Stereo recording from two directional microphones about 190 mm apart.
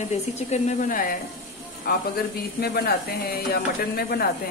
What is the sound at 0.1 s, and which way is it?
A woman's voice, 35° left (ahead or behind).